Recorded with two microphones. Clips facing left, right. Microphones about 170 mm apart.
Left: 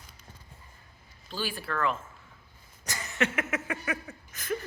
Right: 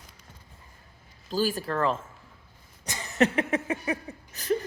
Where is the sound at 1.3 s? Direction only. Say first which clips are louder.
Right 7 dB; 40° right (ahead or behind).